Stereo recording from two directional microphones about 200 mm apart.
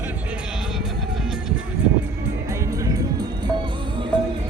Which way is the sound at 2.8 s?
15° right (ahead or behind).